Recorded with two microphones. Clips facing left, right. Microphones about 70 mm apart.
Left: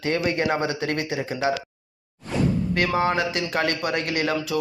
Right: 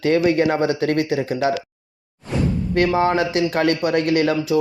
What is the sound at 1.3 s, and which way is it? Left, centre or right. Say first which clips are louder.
Speech: right 4 dB; left.